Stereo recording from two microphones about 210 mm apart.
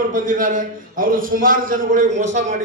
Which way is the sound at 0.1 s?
40° right (ahead or behind).